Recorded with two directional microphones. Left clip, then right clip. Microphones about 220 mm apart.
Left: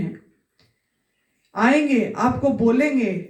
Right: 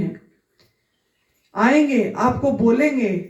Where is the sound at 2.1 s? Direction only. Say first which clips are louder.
Right 1 dB; 40° left (ahead or behind).